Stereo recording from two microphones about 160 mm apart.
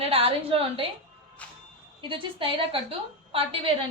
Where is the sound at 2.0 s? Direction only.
30° right (ahead or behind).